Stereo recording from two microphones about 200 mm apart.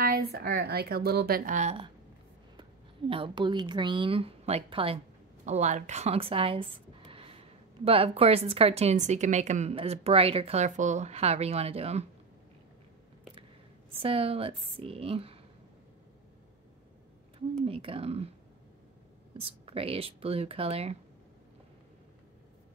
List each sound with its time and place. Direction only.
0.0 s speech: 50° right (ahead or behind); by 1.9 s 35° right (ahead or behind)
3.1 s a woman's voice: 25° right (ahead or behind)
14.0 s a woman's voice: 30° right (ahead or behind)
17.6 s a woman's voice: 30° right (ahead or behind)
19.3 s a woman's voice: 30° right (ahead or behind)